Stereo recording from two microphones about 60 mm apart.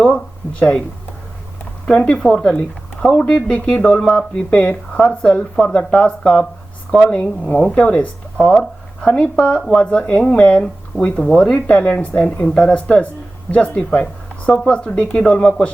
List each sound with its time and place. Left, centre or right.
1.9 s speech: centre
9.6 s speech: centre
9.8 s speech: centre